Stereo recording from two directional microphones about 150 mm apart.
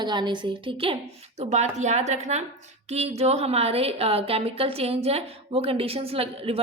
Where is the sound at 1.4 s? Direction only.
45° right (ahead or behind).